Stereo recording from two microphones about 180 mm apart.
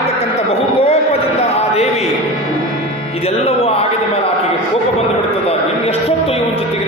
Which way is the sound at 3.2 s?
35° left (ahead or behind).